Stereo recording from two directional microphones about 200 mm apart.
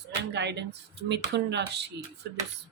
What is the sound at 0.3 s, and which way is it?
Speech, 60° right (ahead or behind).